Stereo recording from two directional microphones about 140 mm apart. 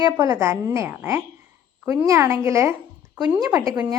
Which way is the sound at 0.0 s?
25° right (ahead or behind).